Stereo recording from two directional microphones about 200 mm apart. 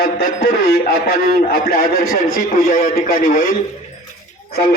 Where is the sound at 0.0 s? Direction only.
50° left (ahead or behind).